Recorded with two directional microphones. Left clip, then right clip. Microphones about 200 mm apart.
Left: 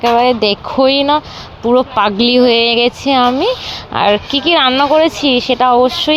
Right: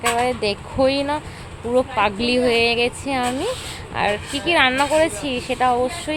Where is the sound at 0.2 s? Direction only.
30° left (ahead or behind).